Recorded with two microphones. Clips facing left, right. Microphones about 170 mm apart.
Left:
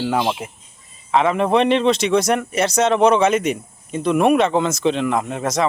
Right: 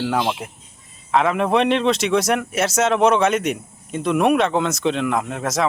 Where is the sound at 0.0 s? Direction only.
5° left (ahead or behind).